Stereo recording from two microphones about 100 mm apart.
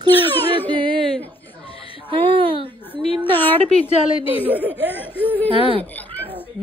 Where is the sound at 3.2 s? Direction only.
20° left (ahead or behind).